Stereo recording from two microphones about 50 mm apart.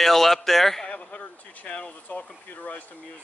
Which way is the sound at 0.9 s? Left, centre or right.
Left.